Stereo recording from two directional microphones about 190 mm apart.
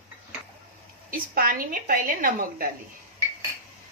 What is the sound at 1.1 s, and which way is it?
A woman's voice, 50° right (ahead or behind).